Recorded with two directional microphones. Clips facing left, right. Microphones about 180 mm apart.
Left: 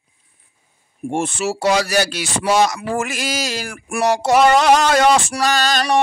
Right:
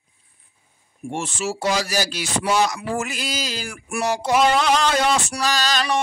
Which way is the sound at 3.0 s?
90° left.